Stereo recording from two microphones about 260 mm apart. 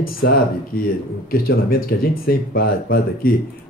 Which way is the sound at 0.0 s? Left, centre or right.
Left.